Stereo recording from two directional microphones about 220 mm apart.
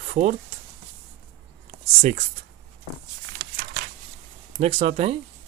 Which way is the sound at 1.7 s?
30° right (ahead or behind).